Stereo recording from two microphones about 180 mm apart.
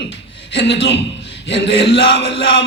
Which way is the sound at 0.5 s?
80° left.